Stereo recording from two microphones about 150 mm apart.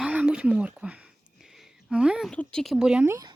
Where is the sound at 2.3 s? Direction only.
5° left (ahead or behind).